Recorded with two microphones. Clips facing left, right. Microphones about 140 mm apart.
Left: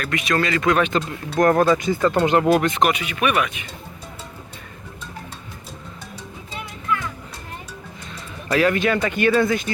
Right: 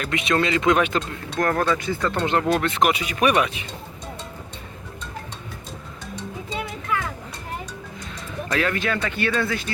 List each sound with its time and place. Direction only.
0.0 s speech: 25° right (ahead or behind)
1.4 s speech: 20° left (ahead or behind)
2.9 s speech: 35° right (ahead or behind)
8.4 s speech: 10° left (ahead or behind)
8.7 s speech: 20° left (ahead or behind)